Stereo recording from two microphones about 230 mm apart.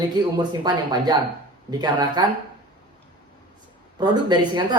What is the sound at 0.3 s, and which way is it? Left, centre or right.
Speech, centre.